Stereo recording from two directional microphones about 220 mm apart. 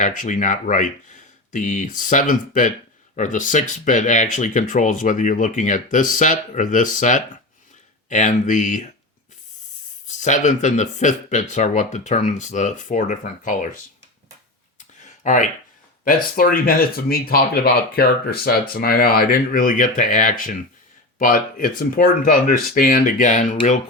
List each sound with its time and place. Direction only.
0.0 s speech: 35° left (ahead or behind)
10.1 s speech: 35° left (ahead or behind)
14.8 s a sound: 35° left (ahead or behind)
16.0 s speech: 40° left (ahead or behind)